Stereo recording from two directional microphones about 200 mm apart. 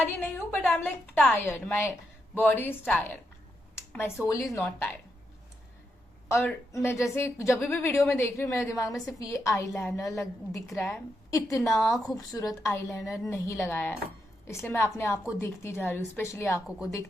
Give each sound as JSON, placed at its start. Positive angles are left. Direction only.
{"t": 0.0, "sound": "a woman's voice", "side_deg": 10}
{"t": 6.2, "sound": "a woman's voice", "side_deg": 10}
{"t": 11.6, "sound": "a woman's voice", "side_deg": 0}
{"t": 12.1, "sound": "a woman's voice", "side_deg": 15}